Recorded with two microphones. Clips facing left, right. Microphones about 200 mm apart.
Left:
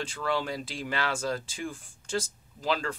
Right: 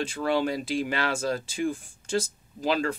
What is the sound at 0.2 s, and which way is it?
Speech, 20° right (ahead or behind).